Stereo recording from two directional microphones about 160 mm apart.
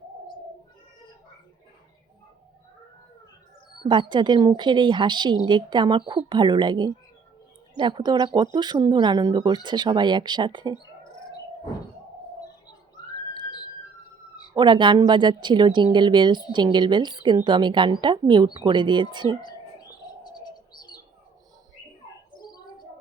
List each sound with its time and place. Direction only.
3.8 s speech: 30° right (ahead or behind)
13.0 s a sound: 25° left (ahead or behind)
14.5 s speech: 30° right (ahead or behind)
20.2 s bird: 25° left (ahead or behind)
22.4 s bird: 25° left (ahead or behind)